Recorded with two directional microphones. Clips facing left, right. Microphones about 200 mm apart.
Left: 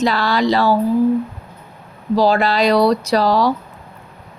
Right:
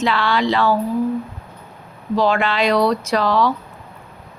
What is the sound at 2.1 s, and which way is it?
Speech, 35° left (ahead or behind).